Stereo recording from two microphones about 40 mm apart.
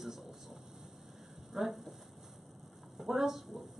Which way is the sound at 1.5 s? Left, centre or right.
Centre.